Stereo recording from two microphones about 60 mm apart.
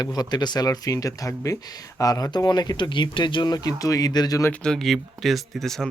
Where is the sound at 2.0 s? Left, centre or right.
Left.